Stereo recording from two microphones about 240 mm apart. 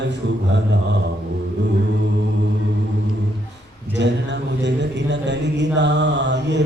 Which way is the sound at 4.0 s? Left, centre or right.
Right.